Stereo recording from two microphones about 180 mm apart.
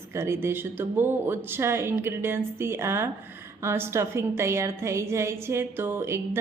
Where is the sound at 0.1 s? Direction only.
15° right (ahead or behind).